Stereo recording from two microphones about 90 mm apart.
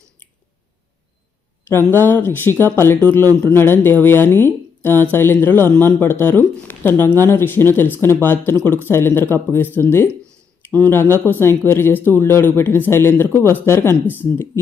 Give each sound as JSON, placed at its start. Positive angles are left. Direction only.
{"t": 1.9, "sound": "speech", "side_deg": 20}